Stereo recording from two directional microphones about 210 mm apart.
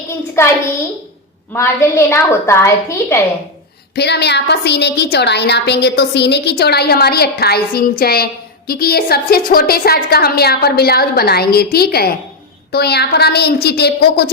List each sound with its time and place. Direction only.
0.3 s a woman's voice: 10° left (ahead or behind)
3.9 s a woman's voice: 50° left (ahead or behind)